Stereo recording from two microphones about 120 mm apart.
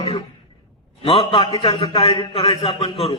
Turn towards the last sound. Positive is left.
turn(degrees=55)  # may be behind; listen again after turning